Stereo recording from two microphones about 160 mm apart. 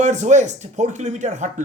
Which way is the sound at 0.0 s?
50° right (ahead or behind).